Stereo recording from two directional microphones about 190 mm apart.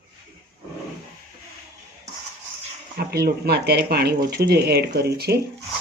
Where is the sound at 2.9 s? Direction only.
55° right (ahead or behind).